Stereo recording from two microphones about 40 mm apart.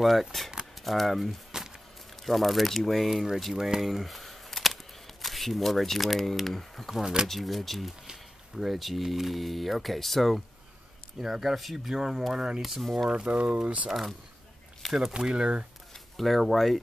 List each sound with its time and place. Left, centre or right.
0.0 s speech: centre
1.5 s a sound: centre
2.2 s speech: centre
7.0 s speech: centre
7.2 s speech: centre
11.1 s speech: centre
12.6 s speech: centre
13.1 s speech: right
13.8 s speech: centre
14.8 s a sound: centre
15.1 s speech: right
15.9 s speech: centre